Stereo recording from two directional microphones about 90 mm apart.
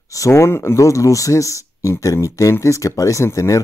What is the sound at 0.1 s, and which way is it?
Speech, 35° left (ahead or behind).